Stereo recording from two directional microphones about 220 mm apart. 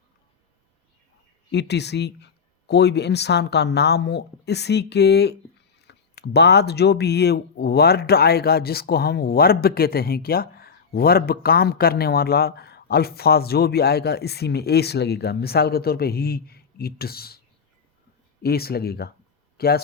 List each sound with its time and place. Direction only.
1.5 s speech: 50° left (ahead or behind)
18.4 s speech: 45° left (ahead or behind)